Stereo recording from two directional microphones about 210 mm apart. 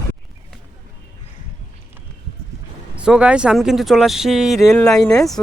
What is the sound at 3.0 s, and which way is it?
Speech, 5° right (ahead or behind).